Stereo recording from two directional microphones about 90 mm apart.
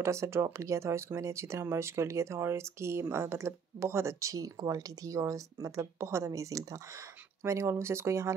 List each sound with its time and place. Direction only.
0.0 s speech: 30° right (ahead or behind)